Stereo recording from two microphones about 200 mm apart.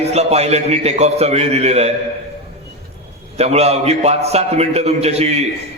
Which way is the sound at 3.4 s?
30° right (ahead or behind).